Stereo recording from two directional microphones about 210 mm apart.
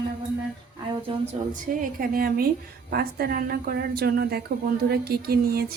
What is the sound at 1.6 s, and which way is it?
A woman's voice, 40° right (ahead or behind).